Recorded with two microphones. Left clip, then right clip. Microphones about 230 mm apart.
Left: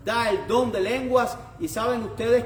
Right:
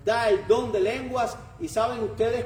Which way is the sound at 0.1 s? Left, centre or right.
Left.